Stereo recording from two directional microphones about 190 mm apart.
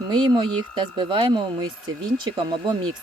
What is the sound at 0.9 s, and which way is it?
Speech, 25° right (ahead or behind).